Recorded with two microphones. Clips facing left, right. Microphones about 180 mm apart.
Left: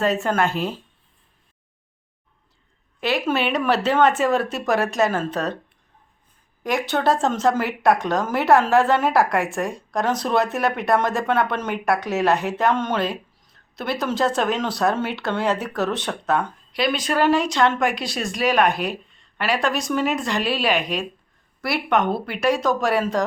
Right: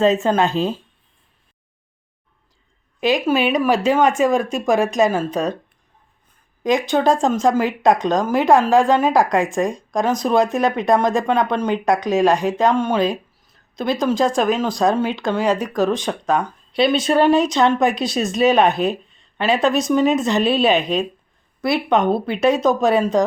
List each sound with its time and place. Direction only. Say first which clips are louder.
0.0 s speech: right 5 dB; 20° right (ahead or behind)
3.0 s speech: right 5 dB; 15° right (ahead or behind)
6.6 s speech: right 5 dB; 20° right (ahead or behind)
16.7 s speech: right 6 dB; 25° right (ahead or behind)